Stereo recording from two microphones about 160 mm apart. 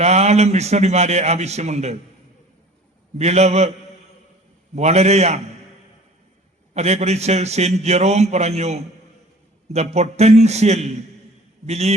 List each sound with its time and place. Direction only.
0.0 s a man's voice: 45° right (ahead or behind)
3.2 s a man's voice: 45° right (ahead or behind)
6.7 s a man's voice: 45° right (ahead or behind)